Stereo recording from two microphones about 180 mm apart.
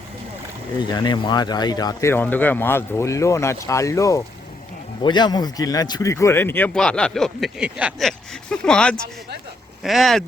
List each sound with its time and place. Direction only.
0.8 s a man's voice: 25° left (ahead or behind); by 10.2 s centre (ahead or behind)